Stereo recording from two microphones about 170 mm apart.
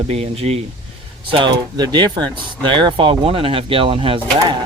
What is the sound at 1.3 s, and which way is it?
Speech, 30° right (ahead or behind).